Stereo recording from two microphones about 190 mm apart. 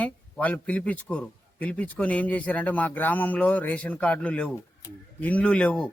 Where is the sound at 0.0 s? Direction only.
5° left (ahead or behind).